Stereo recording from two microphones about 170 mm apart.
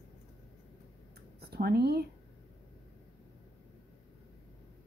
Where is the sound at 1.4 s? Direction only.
70° right (ahead or behind).